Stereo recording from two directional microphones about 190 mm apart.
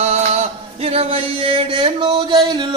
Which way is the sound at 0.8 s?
30° right (ahead or behind).